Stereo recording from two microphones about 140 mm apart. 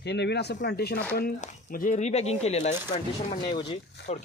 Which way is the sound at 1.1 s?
90° left.